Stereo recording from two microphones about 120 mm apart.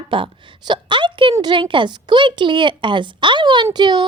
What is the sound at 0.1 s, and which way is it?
A woman's voice, 45° right (ahead or behind).